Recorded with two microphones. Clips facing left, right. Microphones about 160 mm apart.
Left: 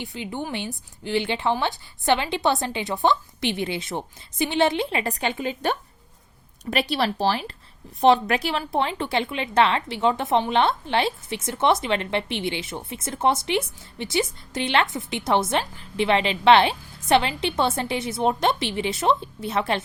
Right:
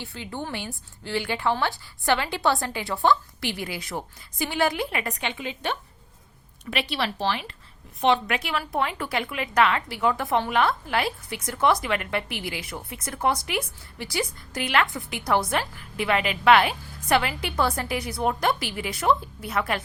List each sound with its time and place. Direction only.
0.0 s a woman's voice: 20° left (ahead or behind)